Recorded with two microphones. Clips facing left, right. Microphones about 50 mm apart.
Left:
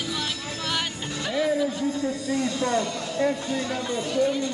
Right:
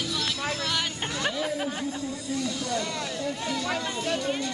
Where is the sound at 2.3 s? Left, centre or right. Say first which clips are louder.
Left 4 dB; left.